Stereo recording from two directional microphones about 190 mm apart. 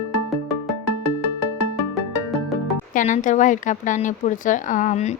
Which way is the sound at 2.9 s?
40° left (ahead or behind).